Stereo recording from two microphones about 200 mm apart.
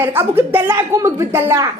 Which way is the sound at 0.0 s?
10° right (ahead or behind).